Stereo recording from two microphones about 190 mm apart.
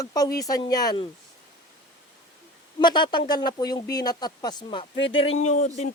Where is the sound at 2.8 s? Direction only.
25° left (ahead or behind).